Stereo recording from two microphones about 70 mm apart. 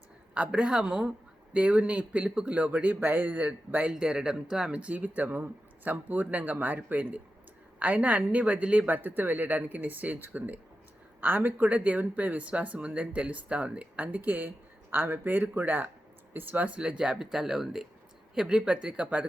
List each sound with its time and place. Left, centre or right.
0.3 s speech: centre